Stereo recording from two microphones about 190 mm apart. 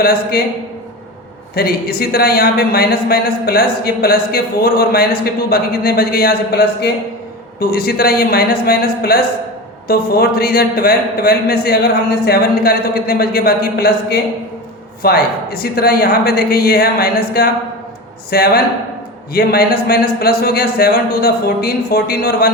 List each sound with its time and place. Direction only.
0.0 s speech: 55° left (ahead or behind)
1.5 s a man's voice: 55° left (ahead or behind)